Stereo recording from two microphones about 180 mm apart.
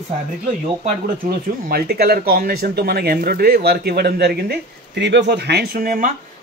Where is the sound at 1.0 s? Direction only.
55° right (ahead or behind).